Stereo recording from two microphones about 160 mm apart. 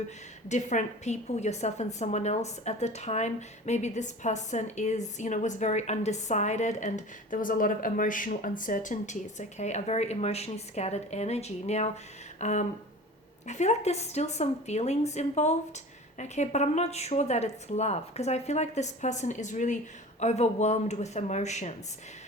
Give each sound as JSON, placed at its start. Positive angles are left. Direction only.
{"t": 0.4, "sound": "a woman's voice", "side_deg": 45}
{"t": 12.4, "sound": "a sound", "side_deg": 45}
{"t": 13.5, "sound": "a woman's voice", "side_deg": 45}